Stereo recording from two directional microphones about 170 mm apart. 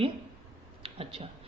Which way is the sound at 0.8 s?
35° right (ahead or behind).